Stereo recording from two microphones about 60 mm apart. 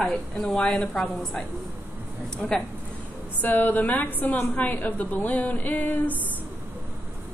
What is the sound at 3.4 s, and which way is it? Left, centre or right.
A woman's voice, left.